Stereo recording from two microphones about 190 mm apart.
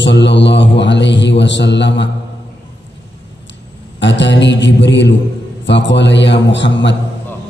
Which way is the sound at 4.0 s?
70° left (ahead or behind).